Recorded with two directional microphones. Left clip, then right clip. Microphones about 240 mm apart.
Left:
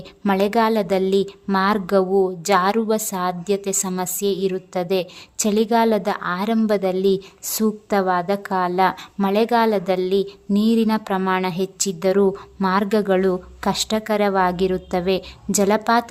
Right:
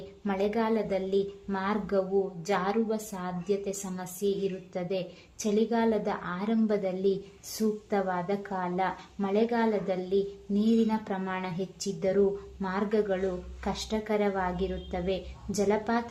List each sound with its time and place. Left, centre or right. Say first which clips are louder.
0.3 s a woman's voice: left 11 dB; left